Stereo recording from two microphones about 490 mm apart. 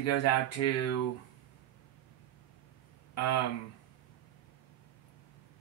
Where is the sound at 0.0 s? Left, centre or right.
Left.